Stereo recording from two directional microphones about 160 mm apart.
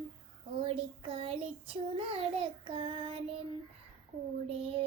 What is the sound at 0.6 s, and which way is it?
Child singing, 35° right (ahead or behind).